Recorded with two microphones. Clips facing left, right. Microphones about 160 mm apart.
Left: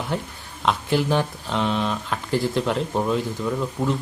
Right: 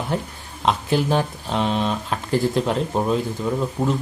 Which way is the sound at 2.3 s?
40° right (ahead or behind).